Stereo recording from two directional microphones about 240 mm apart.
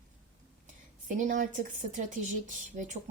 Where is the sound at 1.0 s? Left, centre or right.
Right.